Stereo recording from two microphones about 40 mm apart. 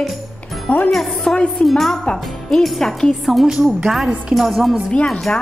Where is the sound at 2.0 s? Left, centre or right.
Centre.